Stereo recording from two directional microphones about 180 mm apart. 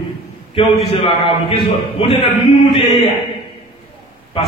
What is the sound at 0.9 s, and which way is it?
A man's voice, 30° left (ahead or behind).